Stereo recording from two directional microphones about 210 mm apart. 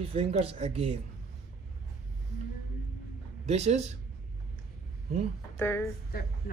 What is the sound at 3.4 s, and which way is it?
Speech, 30° right (ahead or behind).